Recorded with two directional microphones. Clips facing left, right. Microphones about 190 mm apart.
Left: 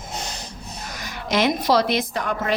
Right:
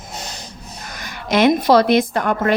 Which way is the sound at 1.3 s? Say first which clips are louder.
Right 6 dB; 55° right (ahead or behind).